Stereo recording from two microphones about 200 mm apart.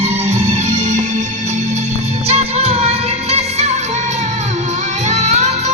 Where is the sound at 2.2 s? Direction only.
30° right (ahead or behind).